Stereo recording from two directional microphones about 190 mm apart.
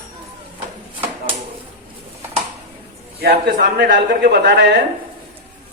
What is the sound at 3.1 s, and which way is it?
A man's voice, 55° right (ahead or behind).